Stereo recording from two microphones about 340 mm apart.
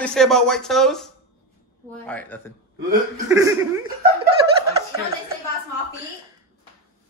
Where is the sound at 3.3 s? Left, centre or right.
Centre.